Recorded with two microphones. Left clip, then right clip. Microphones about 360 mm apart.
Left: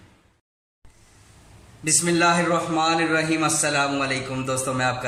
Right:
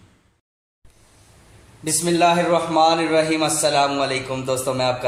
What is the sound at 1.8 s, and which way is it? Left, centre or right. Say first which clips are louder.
Speech: right 2 dB; centre.